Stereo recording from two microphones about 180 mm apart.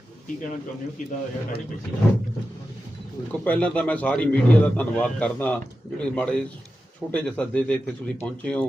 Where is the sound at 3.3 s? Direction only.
10° left (ahead or behind).